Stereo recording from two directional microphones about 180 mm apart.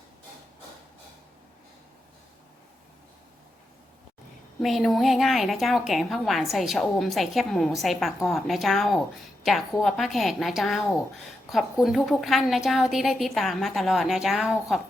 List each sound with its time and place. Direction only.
4.6 s a woman's voice: centre (ahead or behind)